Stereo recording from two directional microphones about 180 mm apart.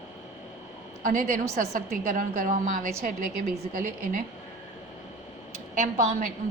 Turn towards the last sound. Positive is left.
turn(degrees=-45)  # may be behind; listen again after turning